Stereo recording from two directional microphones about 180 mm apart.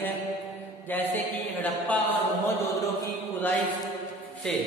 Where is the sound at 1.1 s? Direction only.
10° left (ahead or behind).